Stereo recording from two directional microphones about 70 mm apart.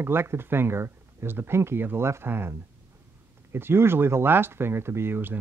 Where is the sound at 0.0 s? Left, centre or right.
Right.